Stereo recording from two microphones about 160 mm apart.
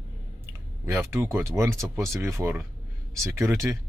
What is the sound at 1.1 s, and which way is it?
A man's voice, 15° right (ahead or behind).